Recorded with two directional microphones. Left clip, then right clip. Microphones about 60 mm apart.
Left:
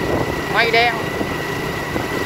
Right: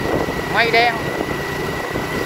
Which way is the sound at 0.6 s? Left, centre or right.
Left.